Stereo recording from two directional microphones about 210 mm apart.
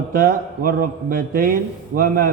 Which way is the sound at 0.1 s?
40° right (ahead or behind).